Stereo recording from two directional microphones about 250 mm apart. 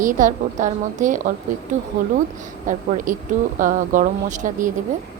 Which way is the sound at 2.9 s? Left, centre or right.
Right.